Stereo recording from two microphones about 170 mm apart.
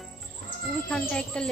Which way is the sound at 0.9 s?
5° left (ahead or behind).